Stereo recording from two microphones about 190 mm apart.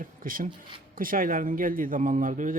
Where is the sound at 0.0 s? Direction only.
45° right (ahead or behind).